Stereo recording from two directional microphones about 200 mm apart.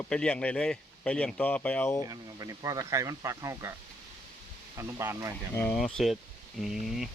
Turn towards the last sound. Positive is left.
turn(degrees=0)  # may be behind; listen again after turning